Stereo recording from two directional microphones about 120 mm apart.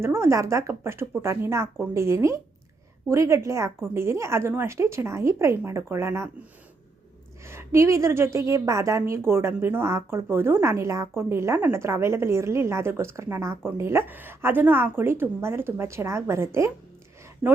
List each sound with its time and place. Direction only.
0.0 s a woman's voice: 20° right (ahead or behind)
7.4 s a woman's voice: 20° right (ahead or behind)